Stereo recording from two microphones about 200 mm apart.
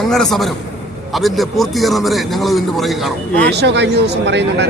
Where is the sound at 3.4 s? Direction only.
55° right (ahead or behind).